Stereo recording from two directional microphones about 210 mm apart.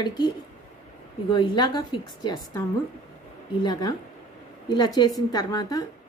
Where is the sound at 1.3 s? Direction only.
20° left (ahead or behind).